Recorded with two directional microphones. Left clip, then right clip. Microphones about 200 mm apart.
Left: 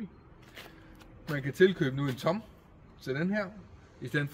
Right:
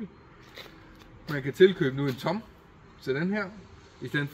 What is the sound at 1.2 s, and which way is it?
Speech, 45° left (ahead or behind).